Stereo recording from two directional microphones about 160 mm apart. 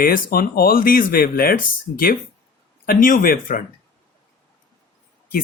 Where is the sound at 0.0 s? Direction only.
65° left (ahead or behind).